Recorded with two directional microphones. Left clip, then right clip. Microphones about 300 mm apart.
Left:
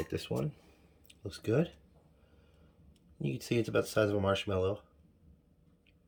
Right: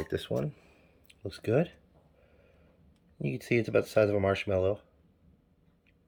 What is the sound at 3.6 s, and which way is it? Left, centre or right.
Speech, left.